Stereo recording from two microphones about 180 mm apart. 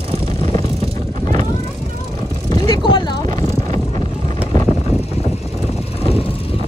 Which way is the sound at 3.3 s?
40° right (ahead or behind).